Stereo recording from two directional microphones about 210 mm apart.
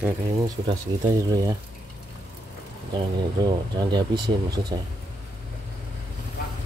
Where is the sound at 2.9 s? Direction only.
20° right (ahead or behind).